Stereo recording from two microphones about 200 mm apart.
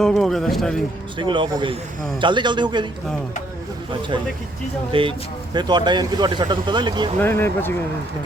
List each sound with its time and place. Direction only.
0.0 s speech: centre (ahead or behind)
1.2 s speech: 25° right (ahead or behind)
4.9 s speech: 25° right (ahead or behind)
7.2 s speech: 10° left (ahead or behind)